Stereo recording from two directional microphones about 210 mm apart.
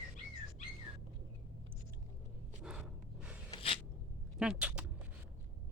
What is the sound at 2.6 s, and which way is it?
Gasp, 5° right (ahead or behind).